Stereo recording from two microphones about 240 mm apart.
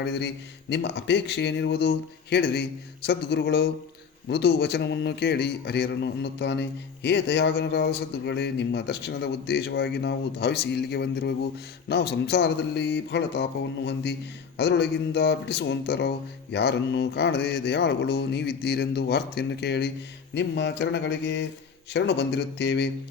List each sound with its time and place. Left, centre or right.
0.0 s speech: left